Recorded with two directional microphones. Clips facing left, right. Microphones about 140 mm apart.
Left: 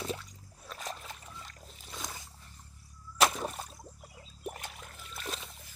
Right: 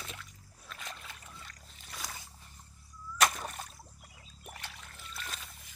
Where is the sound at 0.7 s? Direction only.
40° left (ahead or behind).